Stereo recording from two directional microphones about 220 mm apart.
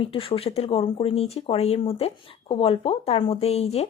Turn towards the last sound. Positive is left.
turn(degrees=30)  # may be behind; listen again after turning